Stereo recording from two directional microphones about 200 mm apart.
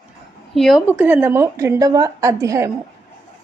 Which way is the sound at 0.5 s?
Centre (ahead or behind).